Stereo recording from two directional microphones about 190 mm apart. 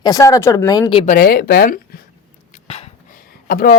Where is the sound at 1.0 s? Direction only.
45° left (ahead or behind).